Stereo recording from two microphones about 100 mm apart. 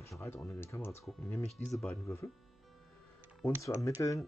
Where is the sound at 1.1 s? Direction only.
10° left (ahead or behind).